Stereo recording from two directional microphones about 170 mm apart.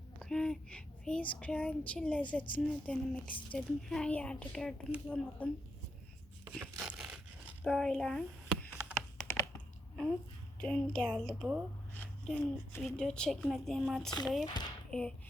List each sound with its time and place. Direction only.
0.2 s a woman's voice: 5° left (ahead or behind)
6.7 s a sound: 5° right (ahead or behind)
7.6 s a woman's voice: 5° left (ahead or behind)
8.7 s computer keyboard: 5° right (ahead or behind)
10.6 s a woman's voice: 5° left (ahead or behind)
11.9 s a woman's voice: 10° left (ahead or behind)
14.1 s speech: 25° left (ahead or behind)
14.8 s a sound: 5° left (ahead or behind)